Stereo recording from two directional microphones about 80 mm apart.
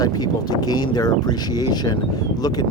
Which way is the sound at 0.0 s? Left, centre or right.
Left.